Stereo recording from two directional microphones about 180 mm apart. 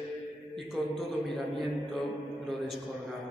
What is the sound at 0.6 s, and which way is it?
Speech, centre (ahead or behind).